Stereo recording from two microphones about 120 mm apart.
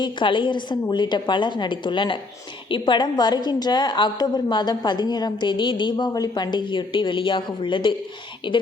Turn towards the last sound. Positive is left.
turn(degrees=40)  # may be behind; listen again after turning